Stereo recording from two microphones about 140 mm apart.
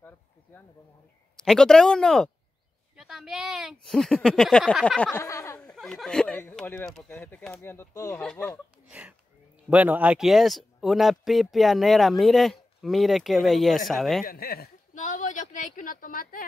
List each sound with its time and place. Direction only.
1.3 s speech: 5° left (ahead or behind)
5.2 s a sound: 20° left (ahead or behind)
5.6 s speech: 5° left (ahead or behind); by 8.2 s 20° left (ahead or behind)
8.2 s speech: 5° left (ahead or behind)
8.8 s speech: 10° right (ahead or behind)
14.2 s speech: 90° left